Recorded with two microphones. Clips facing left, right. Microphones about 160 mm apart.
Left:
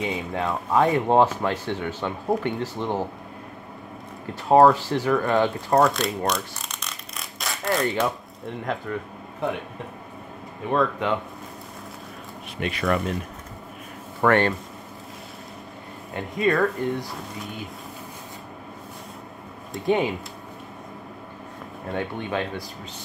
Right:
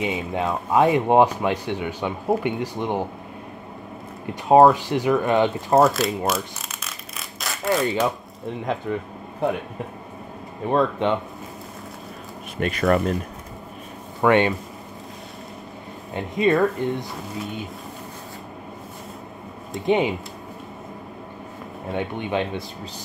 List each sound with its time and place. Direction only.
0.0 s speech: 20° right (ahead or behind)
4.5 s speech: 15° right (ahead or behind)
5.8 s a sound: 5° right (ahead or behind)
8.9 s speech: 15° right (ahead or behind)
10.7 s speech: 30° right (ahead or behind)
12.5 s speech: 45° right (ahead or behind)
14.2 s speech: 15° right (ahead or behind)
16.1 s speech: 25° right (ahead or behind)
17.1 s speech: centre (ahead or behind)
19.9 s speech: 20° right (ahead or behind)
21.9 s speech: 20° right (ahead or behind)